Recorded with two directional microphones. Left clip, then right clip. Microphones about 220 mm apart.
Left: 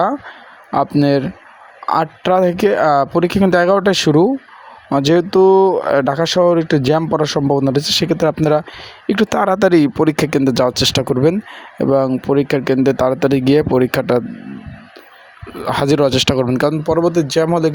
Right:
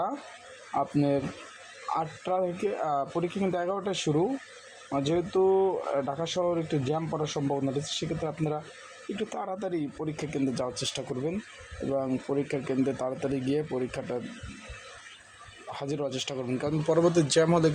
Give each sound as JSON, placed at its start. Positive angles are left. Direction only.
{"t": 0.7, "sound": "speech", "side_deg": 45}
{"t": 15.7, "sound": "speech", "side_deg": 40}